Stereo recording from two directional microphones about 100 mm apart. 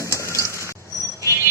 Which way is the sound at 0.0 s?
30° left (ahead or behind).